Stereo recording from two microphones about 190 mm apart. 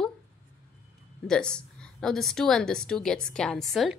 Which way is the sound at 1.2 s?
5° left (ahead or behind).